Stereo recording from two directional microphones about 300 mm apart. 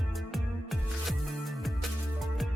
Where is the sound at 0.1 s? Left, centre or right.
Centre.